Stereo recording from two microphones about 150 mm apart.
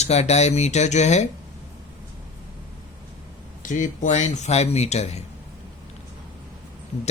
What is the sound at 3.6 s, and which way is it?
Speech, 55° left (ahead or behind).